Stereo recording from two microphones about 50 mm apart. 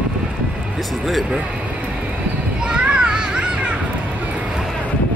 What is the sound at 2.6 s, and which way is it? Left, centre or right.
Children playing, centre.